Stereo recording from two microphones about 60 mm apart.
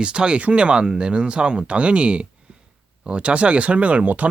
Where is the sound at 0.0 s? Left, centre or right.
Centre.